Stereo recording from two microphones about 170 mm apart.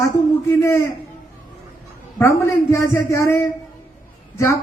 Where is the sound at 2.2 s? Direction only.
15° left (ahead or behind).